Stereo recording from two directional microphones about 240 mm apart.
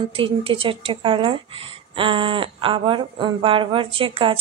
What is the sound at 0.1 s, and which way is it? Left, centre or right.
A woman's voice, right.